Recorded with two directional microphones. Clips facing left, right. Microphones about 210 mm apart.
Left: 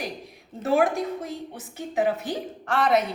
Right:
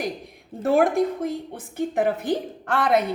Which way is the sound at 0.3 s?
55° right (ahead or behind).